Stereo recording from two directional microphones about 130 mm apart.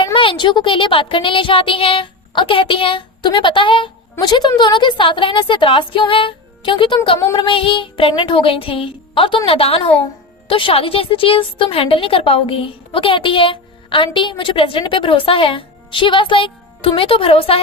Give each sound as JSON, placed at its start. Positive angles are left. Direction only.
{"t": 0.0, "sound": "a woman's voice", "side_deg": 40}